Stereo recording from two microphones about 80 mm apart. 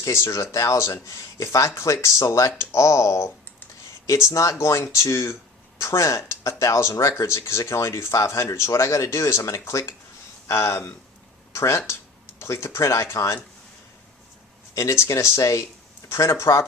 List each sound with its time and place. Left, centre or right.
0.0 s speech: left
14.8 s speech: left